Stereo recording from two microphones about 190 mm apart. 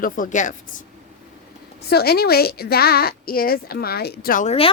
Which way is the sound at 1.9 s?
55° left (ahead or behind).